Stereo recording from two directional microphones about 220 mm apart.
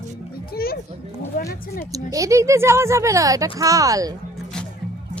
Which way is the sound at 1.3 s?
40° left (ahead or behind).